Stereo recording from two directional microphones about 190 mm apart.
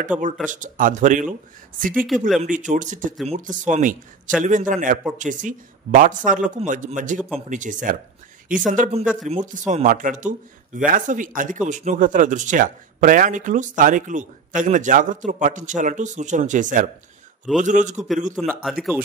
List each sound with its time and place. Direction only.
0.1 s a man's voice: 5° right (ahead or behind)
0.5 s speech: 45° right (ahead or behind)
2.2 s a man's voice: centre (ahead or behind)
2.7 s speech: 45° right (ahead or behind)
18.3 s a man's voice: centre (ahead or behind)